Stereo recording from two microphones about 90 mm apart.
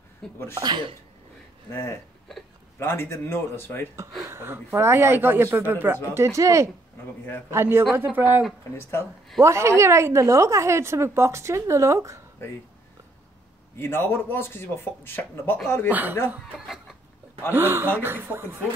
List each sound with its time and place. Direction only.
0.2 s speech: 5° left (ahead or behind)
0.6 s speech: 55° right (ahead or behind)
1.7 s speech: 30° left (ahead or behind)
4.3 s a woman's voice: 25° right (ahead or behind)
13.7 s speech: 25° left (ahead or behind)
15.9 s speech: 20° right (ahead or behind)
16.5 s a sound: centre (ahead or behind)
17.5 s speech: 25° right (ahead or behind)